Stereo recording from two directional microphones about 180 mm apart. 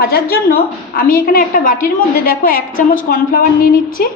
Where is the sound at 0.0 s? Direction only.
55° left (ahead or behind).